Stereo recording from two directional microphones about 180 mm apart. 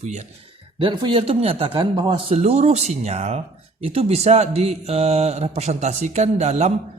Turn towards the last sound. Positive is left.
turn(degrees=-40)  # may be behind; listen again after turning